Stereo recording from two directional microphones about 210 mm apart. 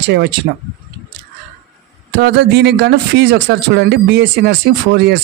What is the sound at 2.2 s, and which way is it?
Speech, 55° right (ahead or behind).